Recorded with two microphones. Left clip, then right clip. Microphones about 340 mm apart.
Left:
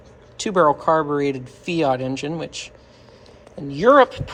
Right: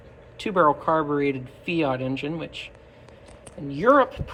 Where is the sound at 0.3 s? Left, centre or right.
Centre.